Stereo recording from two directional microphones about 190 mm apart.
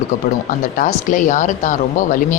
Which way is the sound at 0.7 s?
45° left (ahead or behind).